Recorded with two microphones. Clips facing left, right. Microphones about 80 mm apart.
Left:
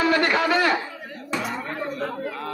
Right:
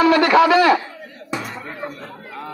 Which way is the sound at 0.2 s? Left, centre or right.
Right.